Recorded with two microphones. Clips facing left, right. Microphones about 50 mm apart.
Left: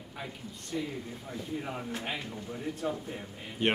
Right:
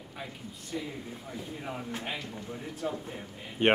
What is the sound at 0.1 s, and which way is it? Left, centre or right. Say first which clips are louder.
Speech: left 1 dB; centre.